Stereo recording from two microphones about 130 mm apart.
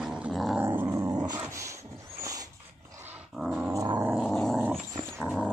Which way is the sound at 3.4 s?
5° right (ahead or behind).